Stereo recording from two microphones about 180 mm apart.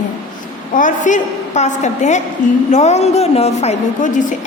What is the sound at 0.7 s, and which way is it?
A woman's voice, 45° left (ahead or behind).